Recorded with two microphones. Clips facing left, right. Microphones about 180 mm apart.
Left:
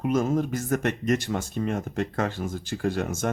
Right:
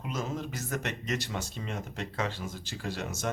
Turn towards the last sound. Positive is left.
turn(degrees=50)  # may be behind; listen again after turning